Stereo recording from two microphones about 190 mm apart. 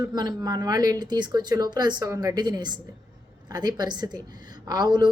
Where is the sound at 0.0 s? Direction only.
20° right (ahead or behind).